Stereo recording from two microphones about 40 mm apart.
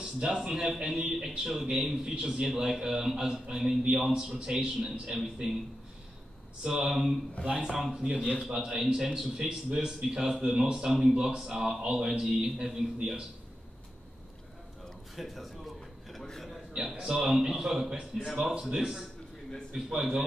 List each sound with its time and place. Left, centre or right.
0.0 s a man's voice: centre
2.1 s a man's voice: centre
6.7 s a man's voice: centre
7.9 s a man's voice: right
15.1 s a sound: centre
16.2 s a man's voice: centre
16.8 s a man's voice: centre
18.5 s a man's voice: centre